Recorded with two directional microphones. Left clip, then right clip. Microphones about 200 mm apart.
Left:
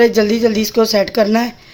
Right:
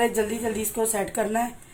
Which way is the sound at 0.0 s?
65° left (ahead or behind).